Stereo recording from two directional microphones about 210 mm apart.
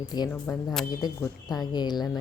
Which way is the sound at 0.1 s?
15° left (ahead or behind).